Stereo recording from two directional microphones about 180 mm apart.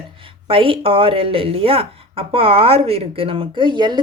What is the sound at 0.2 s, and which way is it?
Speech, 30° right (ahead or behind).